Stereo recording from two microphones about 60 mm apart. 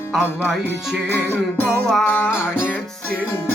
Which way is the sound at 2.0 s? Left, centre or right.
Left.